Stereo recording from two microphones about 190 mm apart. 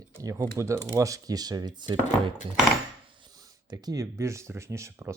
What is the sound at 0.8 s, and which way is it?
Speech, 15° right (ahead or behind).